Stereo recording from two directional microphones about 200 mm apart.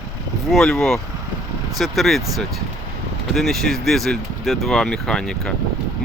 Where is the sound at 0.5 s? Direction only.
Centre (ahead or behind).